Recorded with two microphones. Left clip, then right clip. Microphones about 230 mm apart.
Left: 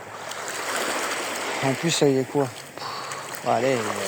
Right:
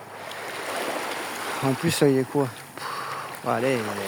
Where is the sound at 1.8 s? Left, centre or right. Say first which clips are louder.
Even; centre.